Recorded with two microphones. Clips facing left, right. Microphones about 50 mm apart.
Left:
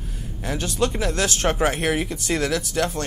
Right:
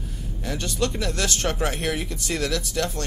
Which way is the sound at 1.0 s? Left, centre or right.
Left.